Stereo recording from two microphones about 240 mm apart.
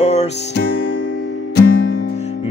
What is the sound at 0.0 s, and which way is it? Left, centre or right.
Music, left.